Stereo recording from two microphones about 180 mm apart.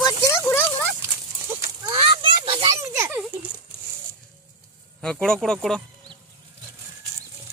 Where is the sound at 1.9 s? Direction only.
25° right (ahead or behind).